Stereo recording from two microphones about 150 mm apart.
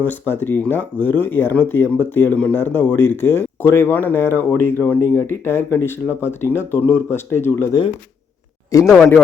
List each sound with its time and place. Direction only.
0.0 s speech: 15° left (ahead or behind)